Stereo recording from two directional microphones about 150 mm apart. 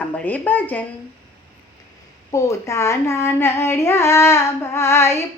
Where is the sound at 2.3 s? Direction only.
20° left (ahead or behind).